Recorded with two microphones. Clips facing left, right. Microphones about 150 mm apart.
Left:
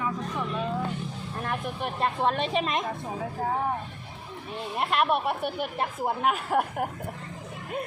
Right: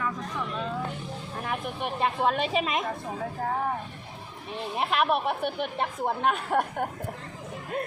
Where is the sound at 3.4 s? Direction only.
10° left (ahead or behind).